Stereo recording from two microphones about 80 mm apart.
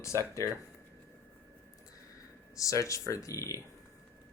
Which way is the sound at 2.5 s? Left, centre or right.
Left.